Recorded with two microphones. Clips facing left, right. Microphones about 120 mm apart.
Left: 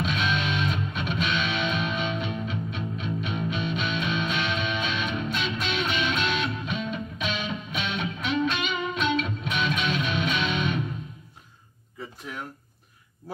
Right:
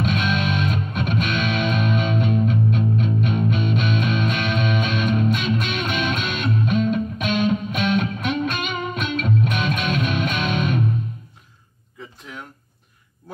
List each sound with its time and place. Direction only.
0.0 s music: 50° right (ahead or behind)